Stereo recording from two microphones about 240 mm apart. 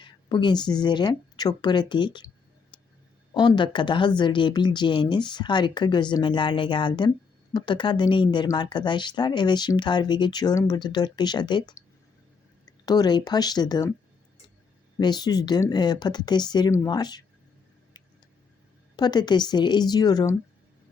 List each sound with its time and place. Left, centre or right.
0.0 s speech: centre
2.7 s a sound: centre
3.3 s speech: centre
14.9 s speech: centre
18.9 s speech: centre